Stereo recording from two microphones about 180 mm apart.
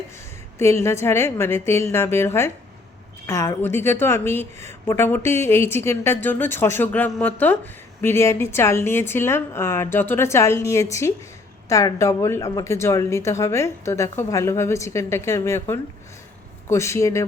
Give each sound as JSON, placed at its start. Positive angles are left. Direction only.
{"t": 0.6, "sound": "a woman's voice", "side_deg": 15}